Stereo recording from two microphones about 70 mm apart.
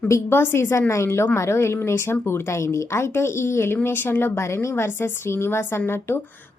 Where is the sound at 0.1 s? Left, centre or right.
Left.